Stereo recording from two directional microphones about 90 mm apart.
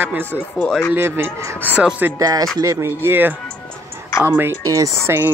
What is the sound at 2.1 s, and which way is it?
Speech, 40° right (ahead or behind).